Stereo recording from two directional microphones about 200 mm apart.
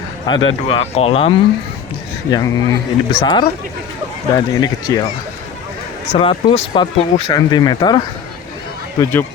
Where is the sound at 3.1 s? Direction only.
20° left (ahead or behind).